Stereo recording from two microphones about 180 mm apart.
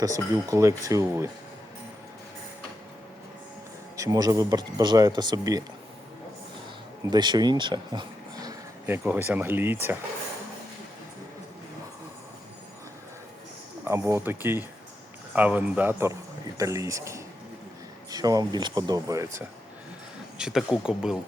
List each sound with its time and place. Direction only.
0.0 s speech: 20° right (ahead or behind)
3.9 s speech: 20° right (ahead or behind)
7.1 s speech: 25° right (ahead or behind)
13.8 s speech: 15° right (ahead or behind)
20.4 s speech: 5° right (ahead or behind)